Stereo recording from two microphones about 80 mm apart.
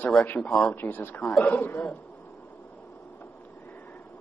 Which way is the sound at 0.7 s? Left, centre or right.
Left.